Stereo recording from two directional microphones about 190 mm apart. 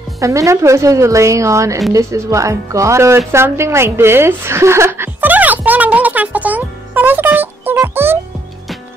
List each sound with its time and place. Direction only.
0.2 s a woman's voice: 15° right (ahead or behind)